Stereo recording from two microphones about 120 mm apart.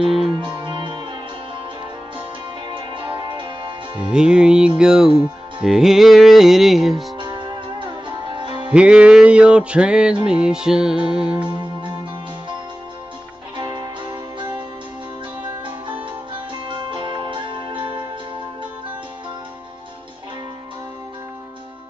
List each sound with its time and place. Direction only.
0.4 s music: 40° right (ahead or behind)
2.7 s music: 45° right (ahead or behind)
4.0 s music: 5° right (ahead or behind)
7.2 s music: 40° right (ahead or behind)
8.7 s music: 10° right (ahead or behind)
13.6 s music: 40° right (ahead or behind)
16.6 s music: 40° right (ahead or behind)